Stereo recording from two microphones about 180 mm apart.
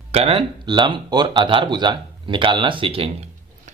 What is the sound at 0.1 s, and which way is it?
Speech, 35° right (ahead or behind).